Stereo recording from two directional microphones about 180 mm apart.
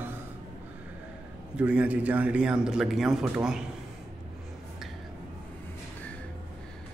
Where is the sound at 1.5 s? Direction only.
5° right (ahead or behind).